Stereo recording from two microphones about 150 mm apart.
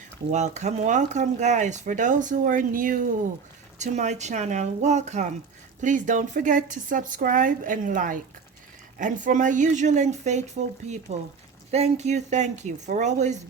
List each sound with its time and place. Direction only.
0.3 s speech: 50° right (ahead or behind)
3.8 s speech: 50° right (ahead or behind)